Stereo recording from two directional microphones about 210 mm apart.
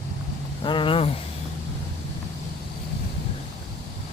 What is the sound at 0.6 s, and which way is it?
Speech, 25° left (ahead or behind).